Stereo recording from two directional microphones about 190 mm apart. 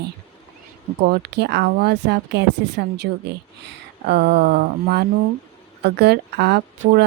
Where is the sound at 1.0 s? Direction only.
60° right (ahead or behind).